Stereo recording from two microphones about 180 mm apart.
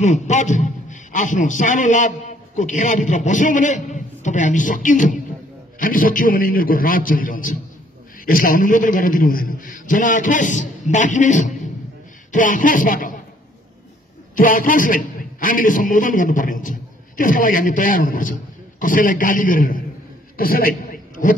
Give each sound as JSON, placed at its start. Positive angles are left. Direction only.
{"t": 0.0, "sound": "a man's voice", "side_deg": 40}
{"t": 14.3, "sound": "a man's voice", "side_deg": 50}
{"t": 20.3, "sound": "a sound", "side_deg": 55}